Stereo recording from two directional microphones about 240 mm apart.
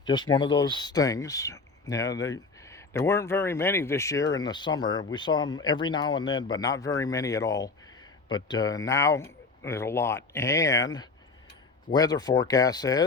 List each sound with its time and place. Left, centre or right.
0.0 s speech: centre